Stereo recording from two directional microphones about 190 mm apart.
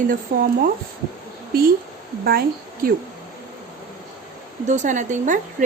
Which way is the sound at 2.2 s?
50° right (ahead or behind).